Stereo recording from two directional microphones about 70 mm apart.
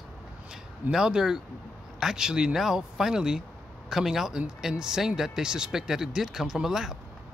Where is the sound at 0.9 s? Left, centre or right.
Centre.